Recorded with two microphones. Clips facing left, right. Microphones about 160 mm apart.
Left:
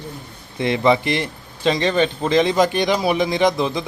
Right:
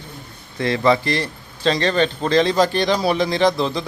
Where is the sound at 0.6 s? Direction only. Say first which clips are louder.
Even; 20° left (ahead or behind).